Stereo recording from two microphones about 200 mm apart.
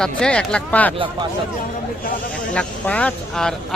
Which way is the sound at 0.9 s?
25° right (ahead or behind).